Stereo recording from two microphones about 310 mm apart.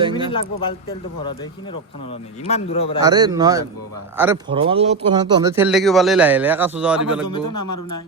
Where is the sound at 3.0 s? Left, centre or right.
Centre.